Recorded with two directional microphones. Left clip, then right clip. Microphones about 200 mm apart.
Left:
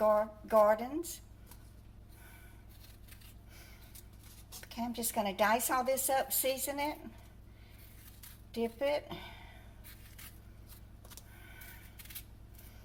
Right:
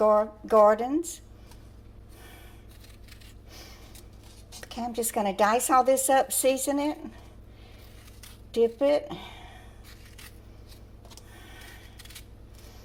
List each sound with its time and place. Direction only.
0.0 s speech: 35° right (ahead or behind)
4.6 s speech: 40° right (ahead or behind)
8.5 s speech: 40° right (ahead or behind)
11.3 s a sound: 35° right (ahead or behind)